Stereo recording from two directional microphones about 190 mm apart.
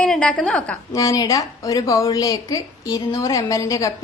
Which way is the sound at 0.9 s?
20° left (ahead or behind).